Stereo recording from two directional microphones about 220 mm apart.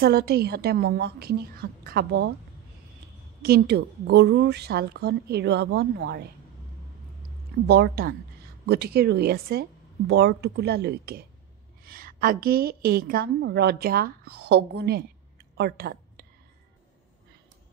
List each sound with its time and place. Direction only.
0.0 s speech: 45° right (ahead or behind)
3.4 s speech: 45° right (ahead or behind)
7.6 s a woman's voice: 50° right (ahead or behind)